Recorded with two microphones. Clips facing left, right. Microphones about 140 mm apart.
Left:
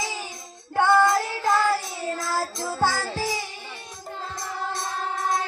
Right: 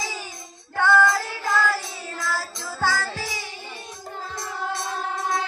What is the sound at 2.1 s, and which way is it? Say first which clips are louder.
Music: right 1 dB; 45° left (ahead or behind).